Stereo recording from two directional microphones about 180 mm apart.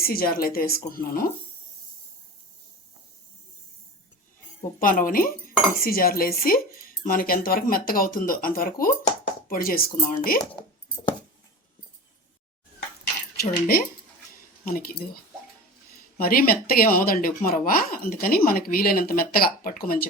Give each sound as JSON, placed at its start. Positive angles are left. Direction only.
{"t": 0.0, "sound": "a woman's voice", "side_deg": 55}
{"t": 4.8, "sound": "a woman's voice", "side_deg": 50}
{"t": 13.4, "sound": "a woman's voice", "side_deg": 55}